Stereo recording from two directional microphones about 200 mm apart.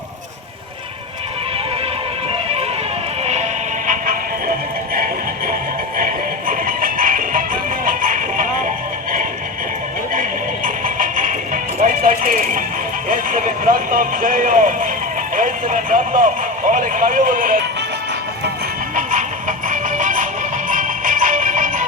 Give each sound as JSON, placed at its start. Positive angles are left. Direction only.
{"t": 3.8, "sound": "music", "side_deg": -45}
{"t": 6.0, "sound": "music", "side_deg": -45}
{"t": 10.2, "sound": "music", "side_deg": -40}
{"t": 15.4, "sound": "a sound", "side_deg": -40}
{"t": 18.9, "sound": "music", "side_deg": -40}